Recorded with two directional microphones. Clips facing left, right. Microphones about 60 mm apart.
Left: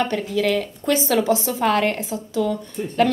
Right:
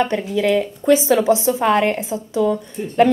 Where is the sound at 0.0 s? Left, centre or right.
Right.